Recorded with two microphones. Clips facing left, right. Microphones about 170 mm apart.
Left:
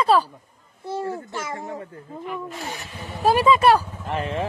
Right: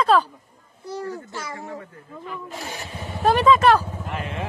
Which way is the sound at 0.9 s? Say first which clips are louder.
Left 3 dB; 25° left (ahead or behind).